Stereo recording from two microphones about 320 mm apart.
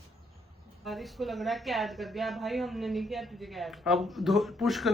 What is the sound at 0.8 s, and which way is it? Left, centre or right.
A woman's voice, centre.